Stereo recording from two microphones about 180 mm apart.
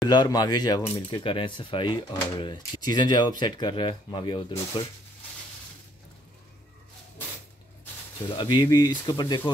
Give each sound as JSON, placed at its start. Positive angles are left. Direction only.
{"t": 0.0, "sound": "speech", "side_deg": 20}
{"t": 8.4, "sound": "speech", "side_deg": 25}